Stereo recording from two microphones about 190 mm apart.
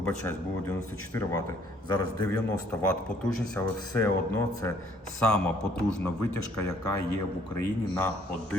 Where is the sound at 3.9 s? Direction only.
15° left (ahead or behind).